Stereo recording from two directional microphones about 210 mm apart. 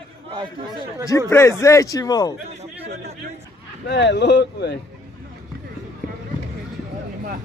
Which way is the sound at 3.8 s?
55° left (ahead or behind).